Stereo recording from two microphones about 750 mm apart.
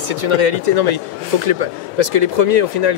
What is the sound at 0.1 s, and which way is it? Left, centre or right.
A man's voice, right.